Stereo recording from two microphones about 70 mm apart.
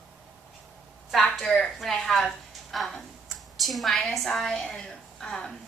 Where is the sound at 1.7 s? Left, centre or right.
Centre.